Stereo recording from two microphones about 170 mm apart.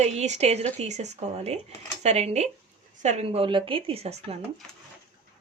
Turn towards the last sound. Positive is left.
turn(degrees=-35)  # may be behind; listen again after turning